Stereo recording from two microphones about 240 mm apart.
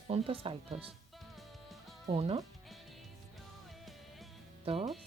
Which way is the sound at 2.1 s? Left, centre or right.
Right.